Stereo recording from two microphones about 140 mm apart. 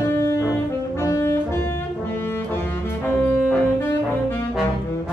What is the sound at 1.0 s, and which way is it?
Music, 20° left (ahead or behind).